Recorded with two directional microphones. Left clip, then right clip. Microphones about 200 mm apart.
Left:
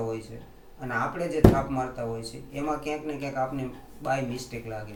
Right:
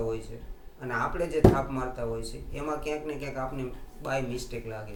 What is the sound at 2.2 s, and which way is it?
Speech, 15° right (ahead or behind).